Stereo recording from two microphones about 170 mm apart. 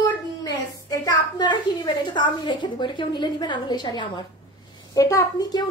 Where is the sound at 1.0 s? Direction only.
25° left (ahead or behind).